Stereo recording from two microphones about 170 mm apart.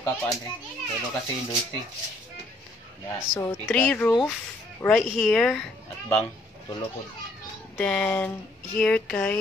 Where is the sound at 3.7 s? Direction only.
10° left (ahead or behind).